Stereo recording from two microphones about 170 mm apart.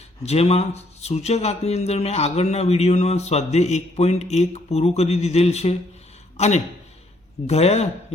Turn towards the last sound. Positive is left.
turn(degrees=40)  # may be behind; listen again after turning